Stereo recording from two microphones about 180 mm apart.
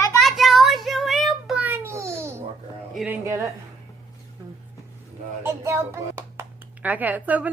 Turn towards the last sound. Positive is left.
turn(degrees=-10)  # may be behind; listen again after turning